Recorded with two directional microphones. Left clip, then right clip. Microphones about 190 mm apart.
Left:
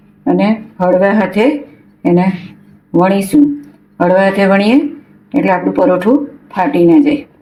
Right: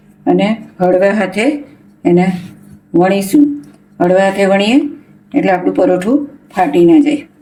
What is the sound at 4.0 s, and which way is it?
Speech, 10° left (ahead or behind).